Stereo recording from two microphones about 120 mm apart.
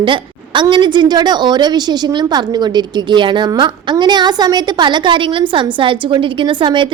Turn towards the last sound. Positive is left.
turn(degrees=-40)  # may be behind; listen again after turning